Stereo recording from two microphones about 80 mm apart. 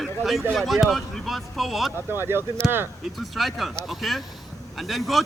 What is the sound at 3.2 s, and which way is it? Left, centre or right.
Speech, centre.